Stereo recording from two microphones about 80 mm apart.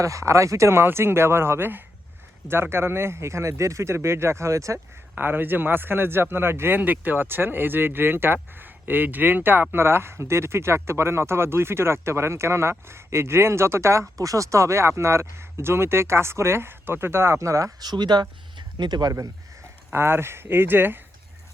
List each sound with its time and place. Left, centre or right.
0.0 s speech: right
5.1 s speech: right
17.7 s speech: right
19.9 s speech: right